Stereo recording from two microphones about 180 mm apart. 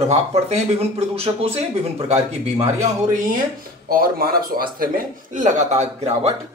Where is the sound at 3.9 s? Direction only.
55° right (ahead or behind).